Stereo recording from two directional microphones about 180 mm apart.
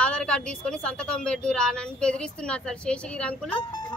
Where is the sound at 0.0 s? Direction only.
5° left (ahead or behind).